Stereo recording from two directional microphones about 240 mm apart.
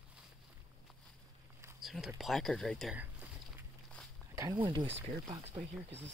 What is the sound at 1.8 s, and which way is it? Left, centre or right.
Speech, centre.